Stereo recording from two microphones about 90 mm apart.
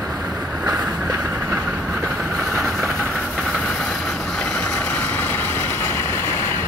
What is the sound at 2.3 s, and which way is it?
Vehicle, 5° left (ahead or behind).